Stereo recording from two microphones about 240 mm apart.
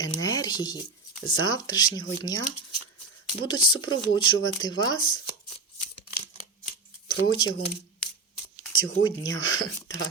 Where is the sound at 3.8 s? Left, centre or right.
Left.